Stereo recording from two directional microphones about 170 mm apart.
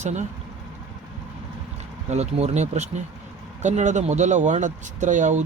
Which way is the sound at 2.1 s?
40° right (ahead or behind).